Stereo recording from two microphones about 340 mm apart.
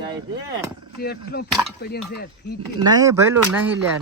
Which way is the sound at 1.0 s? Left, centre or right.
Left.